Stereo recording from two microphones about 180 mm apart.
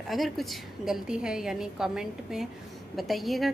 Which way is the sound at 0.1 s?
Centre (ahead or behind).